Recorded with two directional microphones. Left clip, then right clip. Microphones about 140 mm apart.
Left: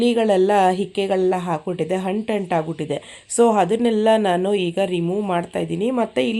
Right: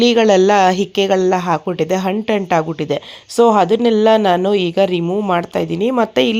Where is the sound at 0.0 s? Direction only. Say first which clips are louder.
Right 6 dB; 25° right (ahead or behind).